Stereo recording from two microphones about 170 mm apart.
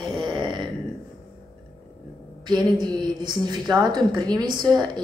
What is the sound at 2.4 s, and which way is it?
Speech, 25° right (ahead or behind).